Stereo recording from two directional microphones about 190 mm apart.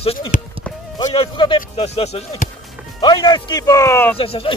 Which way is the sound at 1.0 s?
30° left (ahead or behind).